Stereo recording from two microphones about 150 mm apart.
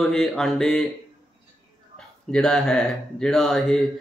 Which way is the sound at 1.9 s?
5° left (ahead or behind).